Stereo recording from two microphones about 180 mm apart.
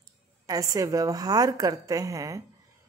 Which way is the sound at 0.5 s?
20° right (ahead or behind).